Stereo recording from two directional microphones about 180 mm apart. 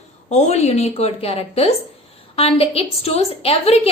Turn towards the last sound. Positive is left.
turn(degrees=35)  # may be behind; listen again after turning